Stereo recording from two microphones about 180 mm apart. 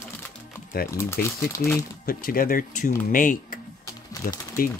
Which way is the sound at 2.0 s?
55° left (ahead or behind).